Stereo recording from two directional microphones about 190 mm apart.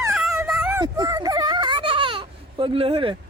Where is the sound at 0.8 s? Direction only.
20° right (ahead or behind).